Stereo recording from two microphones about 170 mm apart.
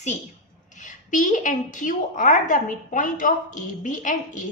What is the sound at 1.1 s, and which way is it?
A woman's voice, 45° left (ahead or behind).